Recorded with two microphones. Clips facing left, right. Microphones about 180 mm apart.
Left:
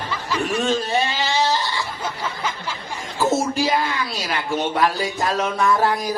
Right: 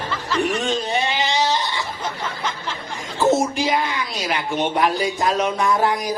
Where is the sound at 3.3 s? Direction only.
20° right (ahead or behind).